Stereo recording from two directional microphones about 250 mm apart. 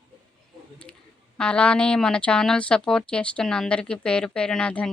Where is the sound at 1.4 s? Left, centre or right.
Centre.